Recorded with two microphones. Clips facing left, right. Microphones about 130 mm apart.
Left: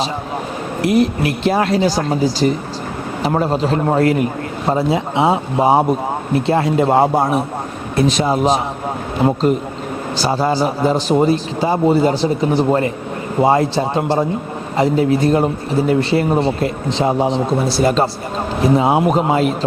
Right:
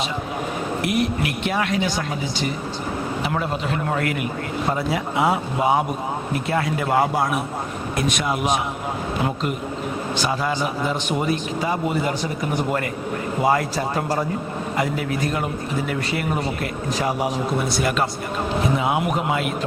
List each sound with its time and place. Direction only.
0.8 s a man's voice: 35° left (ahead or behind)